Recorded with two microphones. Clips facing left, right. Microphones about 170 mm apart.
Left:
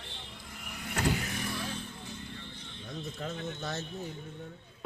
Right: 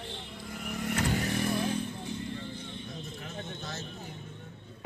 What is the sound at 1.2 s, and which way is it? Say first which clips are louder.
Vehicle: right 7 dB; 30° right (ahead or behind).